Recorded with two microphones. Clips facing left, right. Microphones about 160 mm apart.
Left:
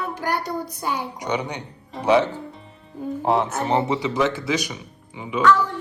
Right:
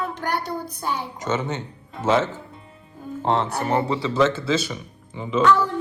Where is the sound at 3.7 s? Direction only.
20° left (ahead or behind).